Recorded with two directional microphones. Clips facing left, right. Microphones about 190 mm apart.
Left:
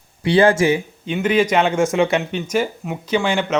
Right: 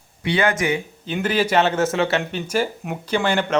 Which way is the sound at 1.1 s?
5° right (ahead or behind).